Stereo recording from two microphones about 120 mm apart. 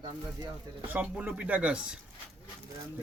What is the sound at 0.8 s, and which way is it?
Speech, 15° right (ahead or behind).